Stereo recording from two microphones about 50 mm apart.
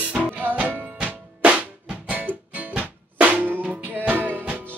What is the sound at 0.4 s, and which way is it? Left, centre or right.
Music, right.